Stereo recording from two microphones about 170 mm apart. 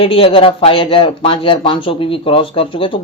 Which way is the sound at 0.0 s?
35° left (ahead or behind).